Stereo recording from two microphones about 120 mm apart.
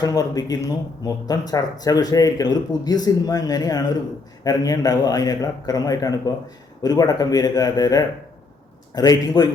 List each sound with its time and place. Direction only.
0.0 s speech: 35° left (ahead or behind)